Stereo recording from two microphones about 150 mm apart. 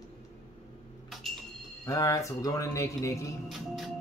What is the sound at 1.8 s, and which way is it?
A man's voice, 20° left (ahead or behind).